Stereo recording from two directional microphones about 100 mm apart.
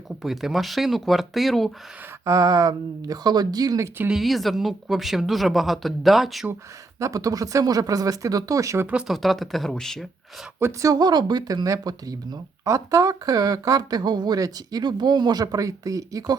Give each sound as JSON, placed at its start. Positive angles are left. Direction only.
{"t": 0.2, "sound": "speech", "side_deg": -5}
{"t": 2.2, "sound": "speech", "side_deg": -35}
{"t": 4.1, "sound": "speech", "side_deg": 0}
{"t": 7.0, "sound": "speech", "side_deg": -35}
{"t": 8.9, "sound": "speech", "side_deg": -10}
{"t": 9.1, "sound": "speech", "side_deg": 0}
{"t": 10.6, "sound": "speech", "side_deg": -30}